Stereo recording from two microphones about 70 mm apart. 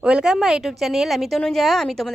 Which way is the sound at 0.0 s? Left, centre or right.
Centre.